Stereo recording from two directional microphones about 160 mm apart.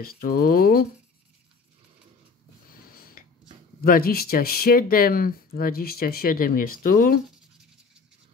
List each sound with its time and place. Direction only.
0.0 s speech: 65° left (ahead or behind)
2.9 s a sound: 65° left (ahead or behind)
3.8 s speech: 65° left (ahead or behind)